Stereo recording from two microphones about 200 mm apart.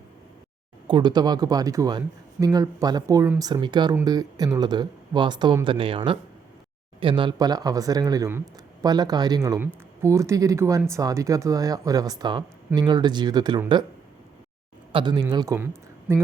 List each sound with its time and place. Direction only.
0.9 s speech: 20° right (ahead or behind)
7.0 s speech: 25° right (ahead or behind)
14.9 s speech: 20° right (ahead or behind)